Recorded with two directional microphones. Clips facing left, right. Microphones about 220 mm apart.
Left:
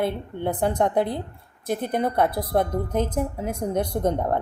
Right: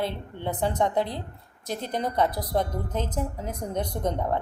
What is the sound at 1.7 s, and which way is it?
A woman's voice, 50° left (ahead or behind).